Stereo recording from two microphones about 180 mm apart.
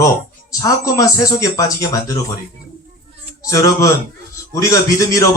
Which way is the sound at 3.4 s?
20° left (ahead or behind).